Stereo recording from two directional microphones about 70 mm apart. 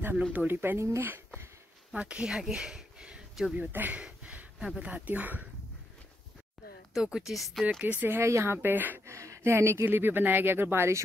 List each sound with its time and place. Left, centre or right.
0.3 s speech: right
0.6 s speech: right
2.0 s speech: centre
3.5 s speech: right
4.0 s a sound: centre
4.7 s speech: right
6.9 s speech: centre
7.8 s speech: right
8.2 s speech: right
9.0 s speech: right